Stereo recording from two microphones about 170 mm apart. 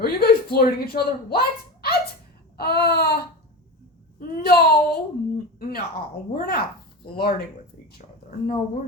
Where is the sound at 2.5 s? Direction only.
65° left (ahead or behind).